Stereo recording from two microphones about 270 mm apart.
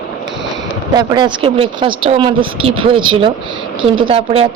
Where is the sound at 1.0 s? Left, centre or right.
Centre.